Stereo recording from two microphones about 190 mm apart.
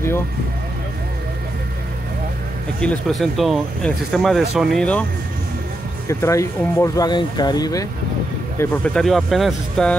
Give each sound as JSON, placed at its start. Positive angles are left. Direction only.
{"t": 2.8, "sound": "speech", "side_deg": 5}
{"t": 6.0, "sound": "speech", "side_deg": 15}
{"t": 8.5, "sound": "speech", "side_deg": 5}